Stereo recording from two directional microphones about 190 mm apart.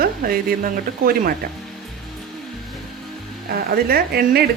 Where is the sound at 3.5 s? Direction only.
55° right (ahead or behind).